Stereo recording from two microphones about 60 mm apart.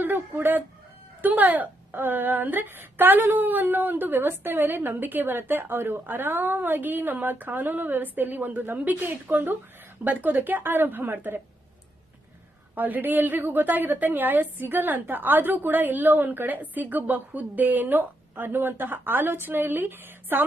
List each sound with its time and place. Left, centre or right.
0.0 s speech: right
12.7 s speech: right